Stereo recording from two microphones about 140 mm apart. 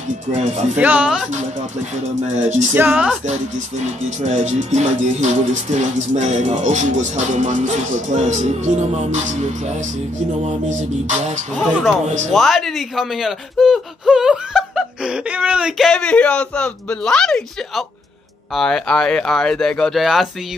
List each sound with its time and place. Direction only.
0.3 s speech: 60° right (ahead or behind)
0.7 s speech: 10° right (ahead or behind)
1.3 s speech: 60° right (ahead or behind)
2.7 s speech: 15° right (ahead or behind)
3.3 s speech: 55° right (ahead or behind)
11.5 s speech: centre (ahead or behind)